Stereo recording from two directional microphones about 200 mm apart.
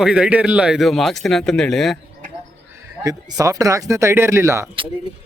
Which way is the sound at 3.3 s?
15° right (ahead or behind).